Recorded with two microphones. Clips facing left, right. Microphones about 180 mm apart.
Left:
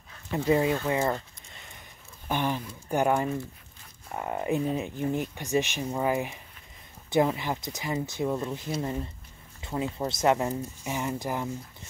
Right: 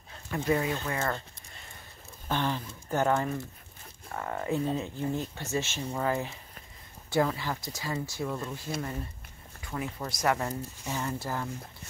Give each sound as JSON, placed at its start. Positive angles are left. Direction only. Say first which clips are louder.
{"t": 0.3, "sound": "speech", "louder": "left 4 dB", "side_deg": 20}
{"t": 2.2, "sound": "speech", "louder": "left 2 dB", "side_deg": 15}